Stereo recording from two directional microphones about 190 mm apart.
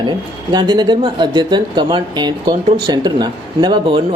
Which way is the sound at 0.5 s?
20° right (ahead or behind).